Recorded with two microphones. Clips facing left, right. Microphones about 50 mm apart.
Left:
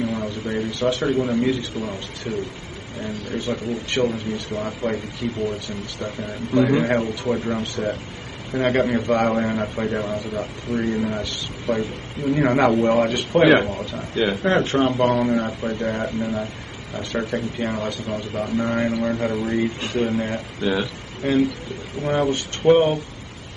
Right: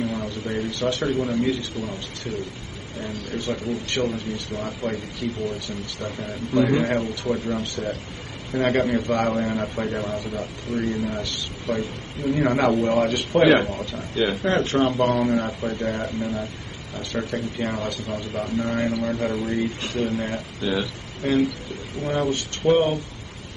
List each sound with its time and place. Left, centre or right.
0.0 s a man's voice: centre
3.0 s speech: centre
10.7 s speech: left
11.1 s speech: centre
17.3 s speech: centre
18.6 s speech: centre